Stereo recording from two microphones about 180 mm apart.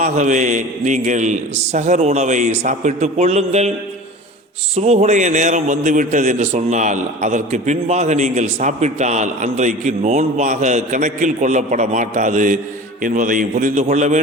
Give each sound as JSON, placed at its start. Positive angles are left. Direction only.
{"t": 0.0, "sound": "a man's voice", "side_deg": -40}
{"t": 4.7, "sound": "a man's voice", "side_deg": -35}